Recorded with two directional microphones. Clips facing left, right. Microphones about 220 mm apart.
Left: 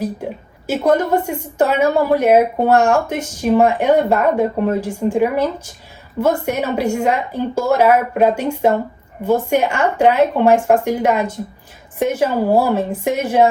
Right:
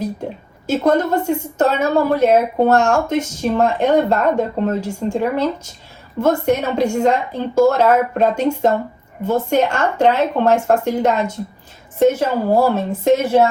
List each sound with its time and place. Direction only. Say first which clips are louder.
0.7 s a woman's voice: even; 10° left (ahead or behind)